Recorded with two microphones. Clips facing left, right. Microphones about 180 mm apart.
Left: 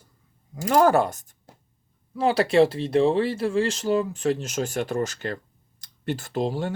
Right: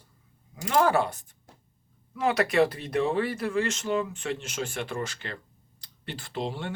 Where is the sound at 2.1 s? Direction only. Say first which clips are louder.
Left 4 dB; 30° left (ahead or behind).